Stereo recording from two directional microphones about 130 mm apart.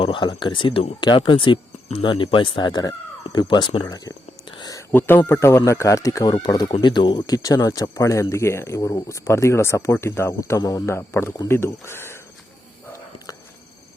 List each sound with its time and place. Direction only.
0.0 s speech: 40° left (ahead or behind)
4.5 s a sound: 35° left (ahead or behind)
4.9 s speech: 15° left (ahead or behind)